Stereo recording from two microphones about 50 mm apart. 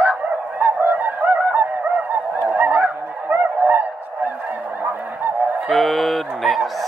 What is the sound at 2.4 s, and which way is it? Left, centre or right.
Honk, right.